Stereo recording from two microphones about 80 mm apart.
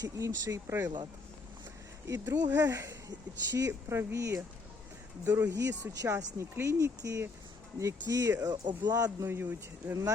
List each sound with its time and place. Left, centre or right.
0.0 s speech: right
2.0 s speech: right
8.4 s speech: right
9.2 s speech: right